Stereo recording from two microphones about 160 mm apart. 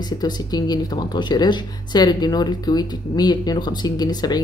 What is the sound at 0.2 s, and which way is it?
Speech, 25° left (ahead or behind).